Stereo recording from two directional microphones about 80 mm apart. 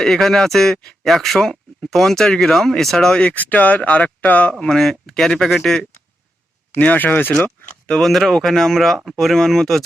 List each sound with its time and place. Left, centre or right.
0.0 s speech: centre
4.6 s speech: centre
6.7 s speech: centre
7.9 s speech: centre